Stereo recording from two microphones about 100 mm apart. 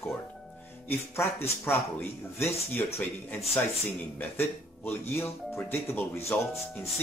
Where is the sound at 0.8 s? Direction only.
25° left (ahead or behind).